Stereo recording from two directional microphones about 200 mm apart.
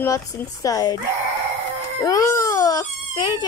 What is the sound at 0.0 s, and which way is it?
Speech, 15° left (ahead or behind).